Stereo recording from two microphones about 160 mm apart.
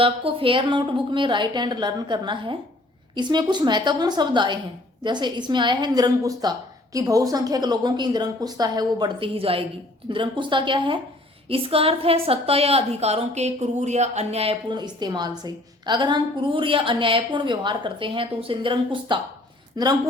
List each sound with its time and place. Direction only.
0.0 s a woman's voice: 35° right (ahead or behind)
14.7 s a woman's voice: 25° right (ahead or behind)